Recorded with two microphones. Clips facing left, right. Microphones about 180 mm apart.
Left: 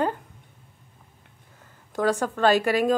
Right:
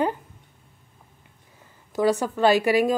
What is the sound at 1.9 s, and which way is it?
Speech, 10° right (ahead or behind).